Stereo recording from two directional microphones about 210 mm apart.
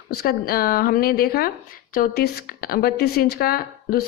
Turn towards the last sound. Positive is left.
turn(degrees=45)  # may be behind; listen again after turning